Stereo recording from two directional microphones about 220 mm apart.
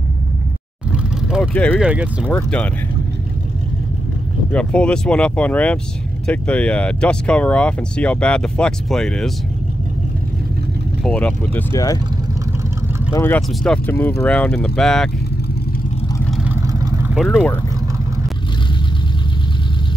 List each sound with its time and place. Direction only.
0.9 s vehicle: 5° right (ahead or behind)
1.5 s speech: 5° left (ahead or behind)
1.8 s speech: 5° right (ahead or behind)
2.2 s speech: 5° left (ahead or behind)
4.5 s speech: 5° left (ahead or behind)
11.1 s speech: 5° left (ahead or behind)
13.1 s speech: 10° left (ahead or behind)
16.3 s vehicle: 10° right (ahead or behind)
17.3 s speech: 10° left (ahead or behind)